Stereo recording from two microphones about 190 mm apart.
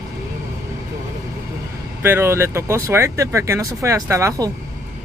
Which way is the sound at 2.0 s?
10° right (ahead or behind).